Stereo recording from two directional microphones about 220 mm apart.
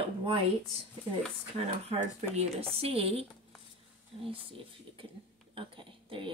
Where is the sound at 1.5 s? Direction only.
30° right (ahead or behind).